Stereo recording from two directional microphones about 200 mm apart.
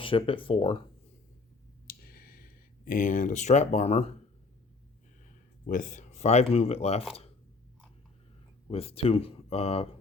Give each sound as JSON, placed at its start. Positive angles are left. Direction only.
{"t": 0.0, "sound": "speech", "side_deg": 25}
{"t": 1.9, "sound": "a sound", "side_deg": 50}
{"t": 5.6, "sound": "speech", "side_deg": 40}
{"t": 8.6, "sound": "speech", "side_deg": 30}